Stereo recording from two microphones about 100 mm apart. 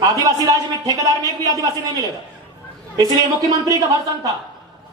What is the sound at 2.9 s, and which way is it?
Speech, 40° right (ahead or behind).